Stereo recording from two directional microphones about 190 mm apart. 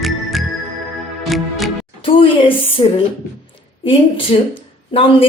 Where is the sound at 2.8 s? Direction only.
30° left (ahead or behind).